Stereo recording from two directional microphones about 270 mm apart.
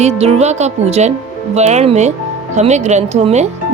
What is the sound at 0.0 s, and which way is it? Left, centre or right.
Speech, right.